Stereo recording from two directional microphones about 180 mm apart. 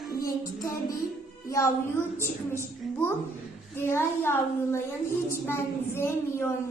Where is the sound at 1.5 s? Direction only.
15° left (ahead or behind).